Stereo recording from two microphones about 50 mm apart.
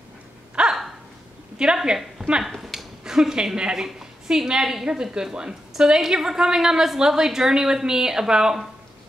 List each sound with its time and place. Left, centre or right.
0.6 s a sound: centre
1.6 s a woman's voice: centre
2.4 s a woman's voice: centre